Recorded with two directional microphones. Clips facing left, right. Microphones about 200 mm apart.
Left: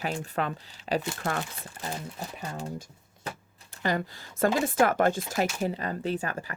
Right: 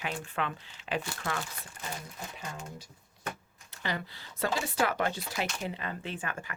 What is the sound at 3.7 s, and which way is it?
Speech, 45° left (ahead or behind).